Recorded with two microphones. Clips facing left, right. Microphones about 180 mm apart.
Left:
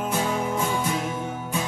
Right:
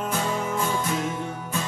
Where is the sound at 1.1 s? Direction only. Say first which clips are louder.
Left 1 dB; 5° left (ahead or behind).